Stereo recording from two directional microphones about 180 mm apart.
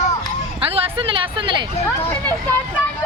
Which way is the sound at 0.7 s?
30° right (ahead or behind).